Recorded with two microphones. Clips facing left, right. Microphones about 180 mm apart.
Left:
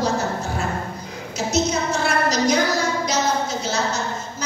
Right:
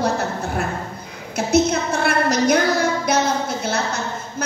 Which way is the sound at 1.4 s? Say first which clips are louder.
Right 4 dB; 55° right (ahead or behind).